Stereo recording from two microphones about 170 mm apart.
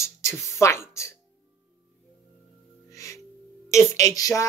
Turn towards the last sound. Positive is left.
turn(degrees=20)  # may be behind; listen again after turning